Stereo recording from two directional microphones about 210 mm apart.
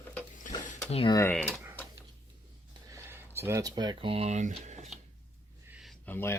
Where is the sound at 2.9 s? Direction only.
10° right (ahead or behind); by 4.9 s 30° right (ahead or behind).